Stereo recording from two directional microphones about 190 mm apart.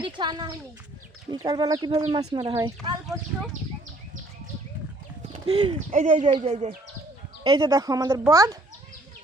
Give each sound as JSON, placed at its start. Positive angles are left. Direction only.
{"t": 0.0, "sound": "speech", "side_deg": -25}
{"t": 5.3, "sound": "bird", "side_deg": -30}
{"t": 5.9, "sound": "speech", "side_deg": -40}
{"t": 7.4, "sound": "speech", "side_deg": -25}